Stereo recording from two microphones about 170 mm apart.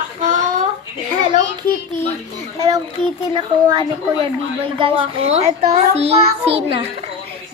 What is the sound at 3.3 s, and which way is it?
A child's voice, 25° right (ahead or behind).